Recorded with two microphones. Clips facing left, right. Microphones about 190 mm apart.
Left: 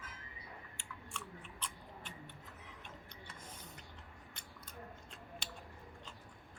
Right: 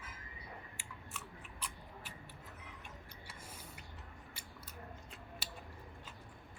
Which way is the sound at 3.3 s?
10° right (ahead or behind).